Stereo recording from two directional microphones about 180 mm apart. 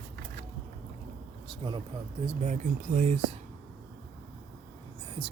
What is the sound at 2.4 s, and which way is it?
Speech, 40° right (ahead or behind).